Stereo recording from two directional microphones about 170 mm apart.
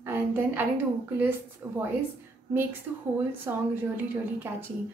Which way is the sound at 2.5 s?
10° right (ahead or behind).